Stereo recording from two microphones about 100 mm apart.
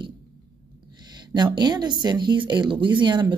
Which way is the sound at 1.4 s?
45° right (ahead or behind).